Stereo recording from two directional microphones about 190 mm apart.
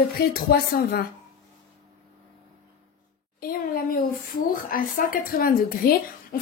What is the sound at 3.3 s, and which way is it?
A woman's voice, 50° left (ahead or behind).